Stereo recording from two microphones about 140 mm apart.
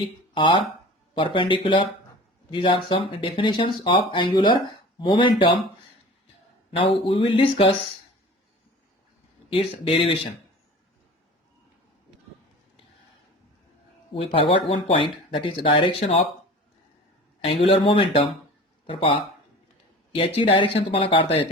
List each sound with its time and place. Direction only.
0.3 s speech: 35° left (ahead or behind)
6.7 s speech: 40° left (ahead or behind)
9.5 s speech: 40° left (ahead or behind)
14.1 s speech: 40° left (ahead or behind)
17.4 s speech: 45° left (ahead or behind)